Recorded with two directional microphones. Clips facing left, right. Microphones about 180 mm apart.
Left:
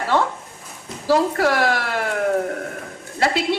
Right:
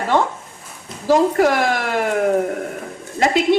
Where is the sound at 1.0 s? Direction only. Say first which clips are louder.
Right 3 dB; 20° right (ahead or behind).